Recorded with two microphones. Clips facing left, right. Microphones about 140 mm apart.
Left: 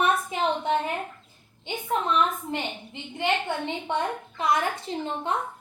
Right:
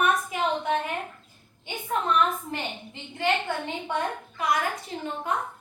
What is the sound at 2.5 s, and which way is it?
A woman's voice, 20° left (ahead or behind).